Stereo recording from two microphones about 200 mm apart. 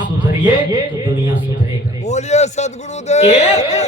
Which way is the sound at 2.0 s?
35° left (ahead or behind).